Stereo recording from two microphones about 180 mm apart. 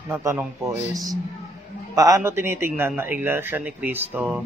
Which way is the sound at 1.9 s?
20° right (ahead or behind).